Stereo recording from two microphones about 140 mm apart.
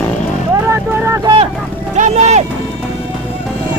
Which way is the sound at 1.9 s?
55° right (ahead or behind).